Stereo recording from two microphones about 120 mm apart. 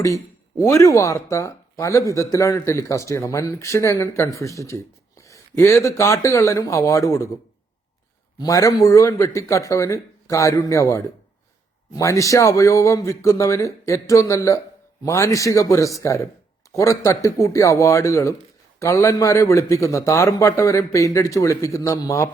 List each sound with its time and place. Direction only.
0.6 s speech: 25° left (ahead or behind)
8.4 s speech: 30° left (ahead or behind)